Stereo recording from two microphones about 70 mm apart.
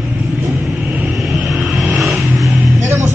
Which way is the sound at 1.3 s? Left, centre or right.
Centre.